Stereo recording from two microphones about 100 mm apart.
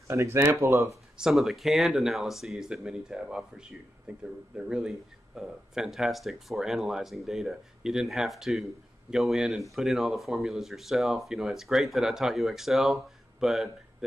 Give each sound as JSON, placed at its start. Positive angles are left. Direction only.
{"t": 0.1, "sound": "speech", "side_deg": -25}
{"t": 1.1, "sound": "speech", "side_deg": -5}